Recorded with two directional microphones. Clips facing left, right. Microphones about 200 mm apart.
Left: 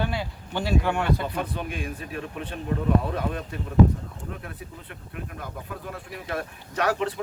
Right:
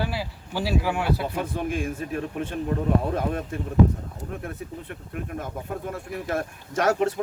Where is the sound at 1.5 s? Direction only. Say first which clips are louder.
Right 5 dB; 45° right (ahead or behind).